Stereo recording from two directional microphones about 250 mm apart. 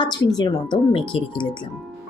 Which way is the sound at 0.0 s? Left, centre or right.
Centre.